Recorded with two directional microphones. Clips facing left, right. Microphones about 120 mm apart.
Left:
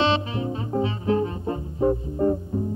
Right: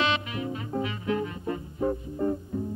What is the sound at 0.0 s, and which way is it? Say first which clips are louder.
Music: left 5 dB; 30° left (ahead or behind).